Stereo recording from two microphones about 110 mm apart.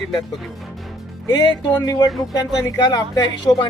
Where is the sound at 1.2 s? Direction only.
35° left (ahead or behind).